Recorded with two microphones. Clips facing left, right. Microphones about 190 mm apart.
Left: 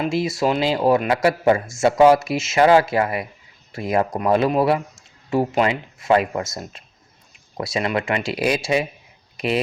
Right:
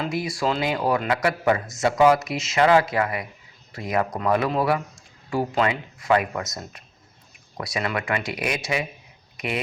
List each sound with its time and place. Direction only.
0.0 s speech: 25° left (ahead or behind)